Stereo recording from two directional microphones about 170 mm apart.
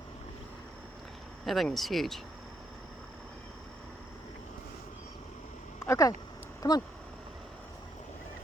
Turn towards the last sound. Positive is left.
turn(degrees=20)  # may be behind; listen again after turning